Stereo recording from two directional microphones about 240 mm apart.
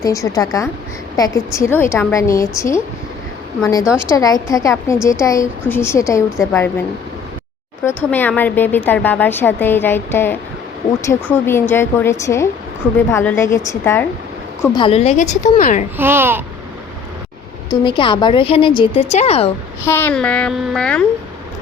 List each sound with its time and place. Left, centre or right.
0.0 s a woman's voice: centre
7.9 s a woman's voice: centre; by 15.9 s left
16.0 s a child's voice: centre
17.7 s speech: left
19.8 s a child's voice: centre